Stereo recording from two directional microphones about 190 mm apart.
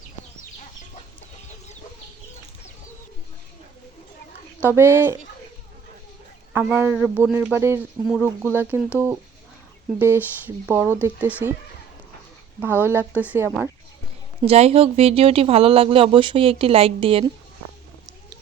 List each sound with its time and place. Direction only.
4.7 s speech: 10° right (ahead or behind)
6.5 s speech: 10° right (ahead or behind)
10.0 s speech: 10° right (ahead or behind)
12.5 s speech: 10° right (ahead or behind)
14.4 s speech: 30° right (ahead or behind)